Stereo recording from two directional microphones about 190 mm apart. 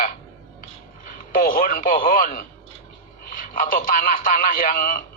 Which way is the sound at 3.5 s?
45° left (ahead or behind).